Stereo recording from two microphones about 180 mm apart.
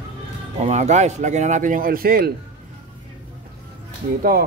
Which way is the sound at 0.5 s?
40° right (ahead or behind).